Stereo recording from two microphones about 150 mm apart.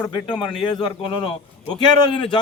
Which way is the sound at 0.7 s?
30° left (ahead or behind).